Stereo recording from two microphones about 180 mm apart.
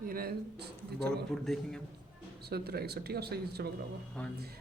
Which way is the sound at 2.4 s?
65° right (ahead or behind).